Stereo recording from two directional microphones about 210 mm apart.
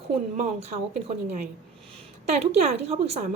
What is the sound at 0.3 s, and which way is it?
A woman's voice, 30° right (ahead or behind).